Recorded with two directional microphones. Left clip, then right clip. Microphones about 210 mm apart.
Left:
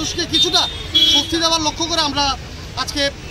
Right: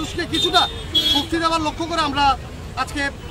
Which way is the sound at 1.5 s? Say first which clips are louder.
Left 3 dB; 20° right (ahead or behind).